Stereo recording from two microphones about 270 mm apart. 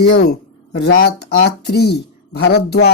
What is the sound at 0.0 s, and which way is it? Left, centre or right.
Speech, left.